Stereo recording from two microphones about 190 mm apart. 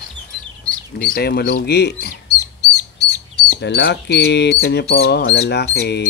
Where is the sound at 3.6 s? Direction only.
65° left (ahead or behind).